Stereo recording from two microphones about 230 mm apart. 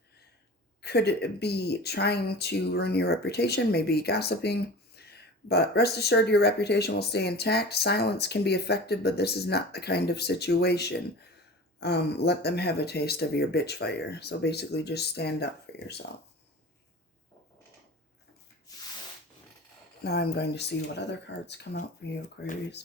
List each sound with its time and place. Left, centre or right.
0.8 s speech: left
18.7 s rub: centre
20.1 s speech: left